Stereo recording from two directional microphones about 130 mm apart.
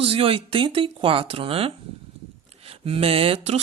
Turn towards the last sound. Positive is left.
turn(degrees=-50)  # may be behind; listen again after turning